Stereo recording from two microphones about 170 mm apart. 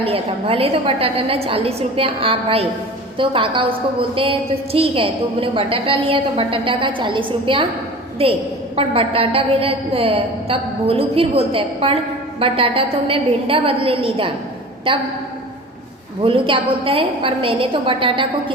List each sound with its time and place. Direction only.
0.0 s a woman's voice: 35° right (ahead or behind)
16.2 s a woman's voice: 30° right (ahead or behind)